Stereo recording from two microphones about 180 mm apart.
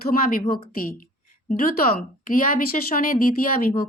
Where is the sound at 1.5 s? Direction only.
55° left (ahead or behind).